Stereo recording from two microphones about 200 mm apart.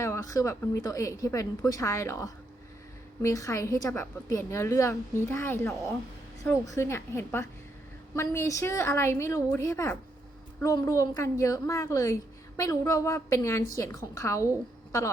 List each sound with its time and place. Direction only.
0.0 s a woman's voice: 15° left (ahead or behind)